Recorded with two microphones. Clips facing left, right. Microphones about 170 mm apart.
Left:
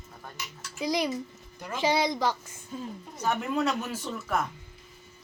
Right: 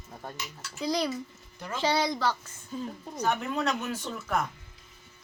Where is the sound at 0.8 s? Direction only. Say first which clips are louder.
Left 1 dB; 15° left (ahead or behind).